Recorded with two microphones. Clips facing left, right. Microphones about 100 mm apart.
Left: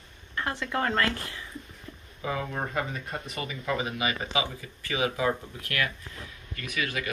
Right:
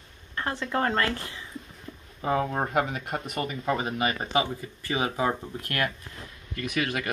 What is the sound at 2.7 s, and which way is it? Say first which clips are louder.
Speech: right 5 dB; 70° right (ahead or behind).